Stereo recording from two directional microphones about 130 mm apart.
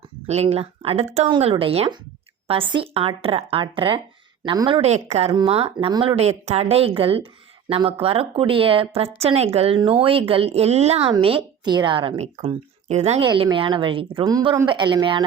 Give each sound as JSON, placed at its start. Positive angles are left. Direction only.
{"t": 0.3, "sound": "a woman's voice", "side_deg": -55}
{"t": 4.8, "sound": "a woman's voice", "side_deg": -55}
{"t": 12.1, "sound": "speech", "side_deg": -50}
{"t": 13.2, "sound": "a woman's voice", "side_deg": -35}
{"t": 14.3, "sound": "speech", "side_deg": -30}
{"t": 14.7, "sound": "a woman's voice", "side_deg": -35}